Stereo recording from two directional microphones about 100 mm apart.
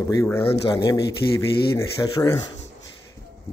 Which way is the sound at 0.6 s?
40° left (ahead or behind).